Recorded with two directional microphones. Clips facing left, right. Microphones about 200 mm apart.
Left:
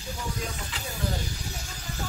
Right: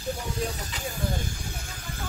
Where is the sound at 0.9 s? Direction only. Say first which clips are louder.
Right 1 dB; 50° right (ahead or behind).